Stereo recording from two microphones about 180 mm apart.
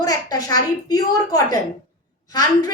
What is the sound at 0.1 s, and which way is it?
Speech, 20° left (ahead or behind).